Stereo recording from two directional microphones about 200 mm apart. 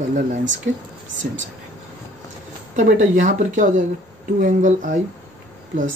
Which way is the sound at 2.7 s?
35° right (ahead or behind).